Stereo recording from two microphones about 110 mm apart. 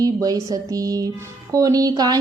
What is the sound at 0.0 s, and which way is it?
Speech, 35° right (ahead or behind).